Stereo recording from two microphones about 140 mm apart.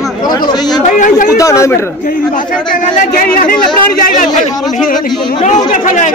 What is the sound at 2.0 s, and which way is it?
Speech, 70° left (ahead or behind).